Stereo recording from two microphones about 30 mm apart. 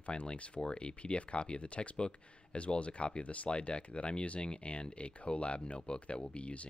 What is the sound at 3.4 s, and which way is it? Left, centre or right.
Speech, left.